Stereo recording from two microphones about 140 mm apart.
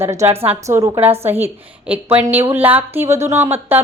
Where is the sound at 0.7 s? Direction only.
20° right (ahead or behind).